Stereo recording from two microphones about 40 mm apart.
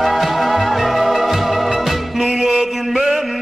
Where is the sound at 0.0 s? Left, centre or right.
Centre.